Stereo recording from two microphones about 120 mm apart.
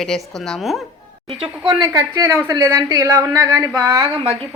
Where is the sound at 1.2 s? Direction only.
55° right (ahead or behind).